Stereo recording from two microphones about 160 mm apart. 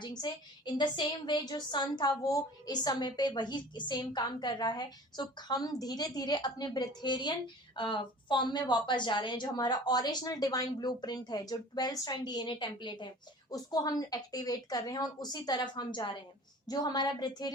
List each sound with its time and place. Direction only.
0.0 s a woman's voice: 25° left (ahead or behind)